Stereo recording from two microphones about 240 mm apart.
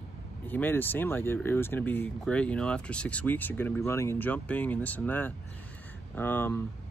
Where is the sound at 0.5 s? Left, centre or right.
Centre.